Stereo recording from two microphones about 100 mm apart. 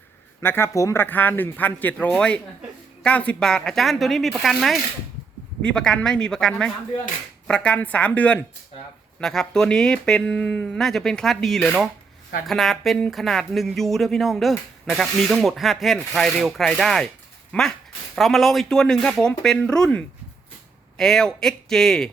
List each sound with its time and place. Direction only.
0.4 s speech: 25° left (ahead or behind)
1.0 s speech: 20° left (ahead or behind)